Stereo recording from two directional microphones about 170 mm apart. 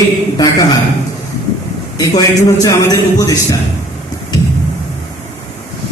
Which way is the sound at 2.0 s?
20° left (ahead or behind).